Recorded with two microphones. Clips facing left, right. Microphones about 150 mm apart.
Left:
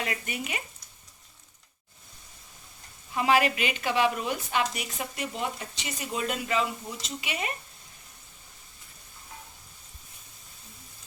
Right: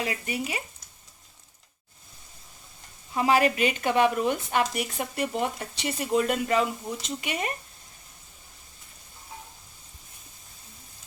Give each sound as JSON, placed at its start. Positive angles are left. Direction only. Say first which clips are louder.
{"t": 0.0, "sound": "speech", "louder": "right 3 dB", "side_deg": -30}
{"t": 3.2, "sound": "speech", "louder": "right 2 dB", "side_deg": -35}